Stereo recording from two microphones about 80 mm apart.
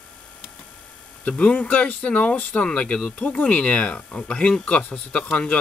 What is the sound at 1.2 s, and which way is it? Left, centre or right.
Speech, centre.